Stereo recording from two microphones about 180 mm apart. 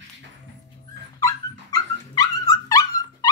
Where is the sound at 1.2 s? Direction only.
20° left (ahead or behind).